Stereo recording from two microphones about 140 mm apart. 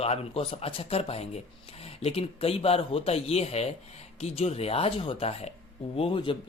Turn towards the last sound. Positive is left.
turn(degrees=40)  # may be behind; listen again after turning